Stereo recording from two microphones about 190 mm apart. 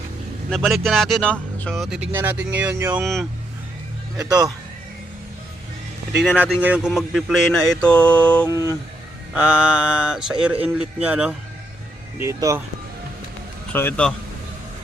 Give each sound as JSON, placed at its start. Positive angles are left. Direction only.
{"t": 0.5, "sound": "speech", "side_deg": 0}
{"t": 4.2, "sound": "speech", "side_deg": -20}
{"t": 6.2, "sound": "speech", "side_deg": -10}
{"t": 8.4, "sound": "speech", "side_deg": 20}
{"t": 9.3, "sound": "a man's voice", "side_deg": -5}
{"t": 13.7, "sound": "speech", "side_deg": 10}